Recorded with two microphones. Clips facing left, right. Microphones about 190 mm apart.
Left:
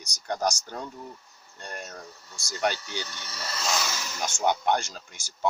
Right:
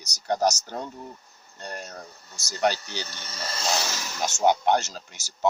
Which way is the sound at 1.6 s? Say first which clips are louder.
Right 2 dB; 40° right (ahead or behind).